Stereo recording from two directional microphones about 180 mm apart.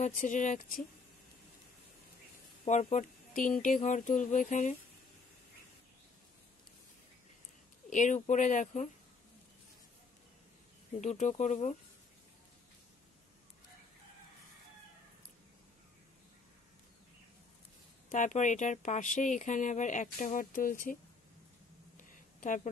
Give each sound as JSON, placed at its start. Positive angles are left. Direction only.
{"t": 0.0, "sound": "speech", "side_deg": 45}
{"t": 2.6, "sound": "speech", "side_deg": 40}
{"t": 7.9, "sound": "speech", "side_deg": 45}
{"t": 11.0, "sound": "speech", "side_deg": 40}
{"t": 18.1, "sound": "speech", "side_deg": 45}
{"t": 21.9, "sound": "a sound", "side_deg": 45}